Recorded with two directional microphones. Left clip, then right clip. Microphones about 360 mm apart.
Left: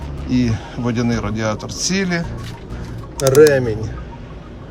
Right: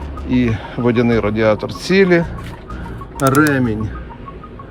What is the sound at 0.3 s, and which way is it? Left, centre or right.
Speech, centre.